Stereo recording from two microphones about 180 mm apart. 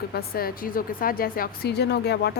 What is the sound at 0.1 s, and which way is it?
A woman's voice, 60° left (ahead or behind).